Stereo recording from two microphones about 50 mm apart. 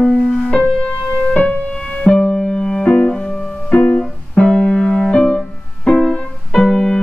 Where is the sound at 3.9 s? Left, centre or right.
Centre.